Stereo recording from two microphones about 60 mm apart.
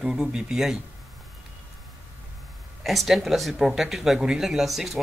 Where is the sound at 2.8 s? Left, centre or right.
Centre.